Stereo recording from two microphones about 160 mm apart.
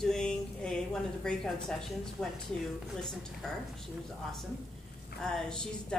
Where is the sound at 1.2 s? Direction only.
5° left (ahead or behind).